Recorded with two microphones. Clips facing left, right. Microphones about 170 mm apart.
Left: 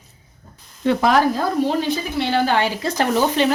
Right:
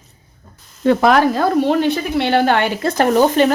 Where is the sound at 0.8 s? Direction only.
50° right (ahead or behind).